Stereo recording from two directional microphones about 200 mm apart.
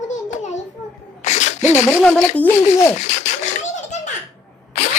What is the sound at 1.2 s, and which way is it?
Sneeze, 35° left (ahead or behind).